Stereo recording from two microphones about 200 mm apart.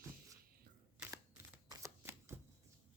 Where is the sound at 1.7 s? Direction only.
15° right (ahead or behind).